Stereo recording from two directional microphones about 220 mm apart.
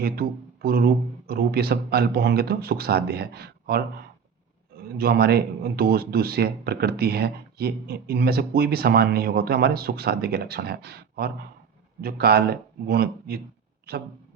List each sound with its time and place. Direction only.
0.0 s speech: 45° right (ahead or behind)
4.9 s speech: 45° right (ahead or behind)